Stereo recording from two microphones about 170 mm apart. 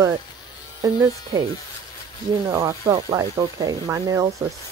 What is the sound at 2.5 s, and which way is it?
Speech, 20° right (ahead or behind).